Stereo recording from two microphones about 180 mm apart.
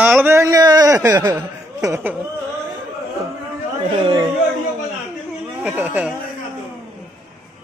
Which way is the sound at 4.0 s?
25° right (ahead or behind).